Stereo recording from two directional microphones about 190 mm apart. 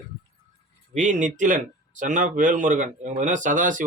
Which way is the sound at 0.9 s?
40° right (ahead or behind).